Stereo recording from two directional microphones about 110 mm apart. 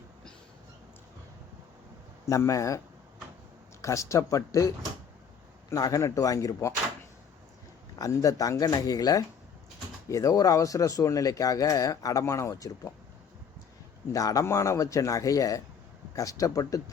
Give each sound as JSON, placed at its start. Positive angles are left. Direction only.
{"t": 2.3, "sound": "speech", "side_deg": 30}
{"t": 5.7, "sound": "speech", "side_deg": 30}
{"t": 7.9, "sound": "speech", "side_deg": 30}
{"t": 14.1, "sound": "speech", "side_deg": 30}